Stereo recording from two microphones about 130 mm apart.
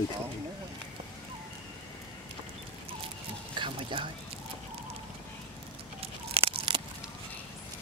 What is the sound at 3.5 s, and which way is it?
Speech, 40° right (ahead or behind).